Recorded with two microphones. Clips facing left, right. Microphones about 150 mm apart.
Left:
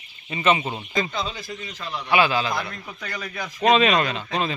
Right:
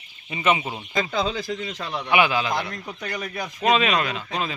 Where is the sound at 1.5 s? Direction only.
90° right.